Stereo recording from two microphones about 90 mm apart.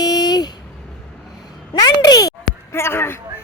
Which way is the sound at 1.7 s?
50° left (ahead or behind).